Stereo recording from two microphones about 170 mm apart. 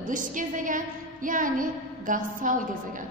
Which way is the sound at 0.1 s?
50° right (ahead or behind).